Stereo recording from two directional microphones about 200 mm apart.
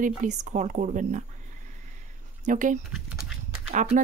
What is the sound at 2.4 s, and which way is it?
Speech, 40° right (ahead or behind).